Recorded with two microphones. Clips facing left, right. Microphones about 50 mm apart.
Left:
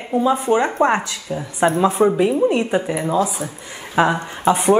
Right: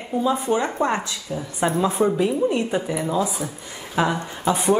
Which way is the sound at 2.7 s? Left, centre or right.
Left.